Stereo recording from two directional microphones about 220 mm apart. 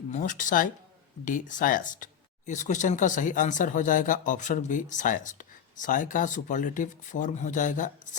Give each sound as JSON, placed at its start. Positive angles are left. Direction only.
{"t": 0.1, "sound": "speech", "side_deg": 35}